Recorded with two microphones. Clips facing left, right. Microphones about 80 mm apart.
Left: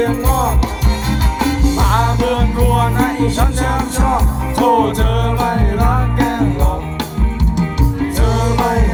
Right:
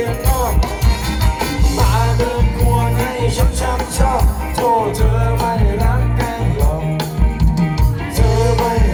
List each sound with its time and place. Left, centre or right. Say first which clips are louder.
1.4 s music: left 4 dB; left
8.2 s music: right 2 dB; left